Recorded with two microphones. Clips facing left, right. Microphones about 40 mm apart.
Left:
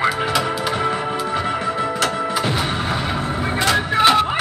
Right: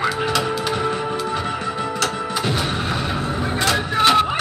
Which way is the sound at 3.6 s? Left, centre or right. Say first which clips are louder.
Left 2 dB; centre.